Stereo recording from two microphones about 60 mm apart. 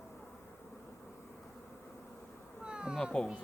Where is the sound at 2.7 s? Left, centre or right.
Centre.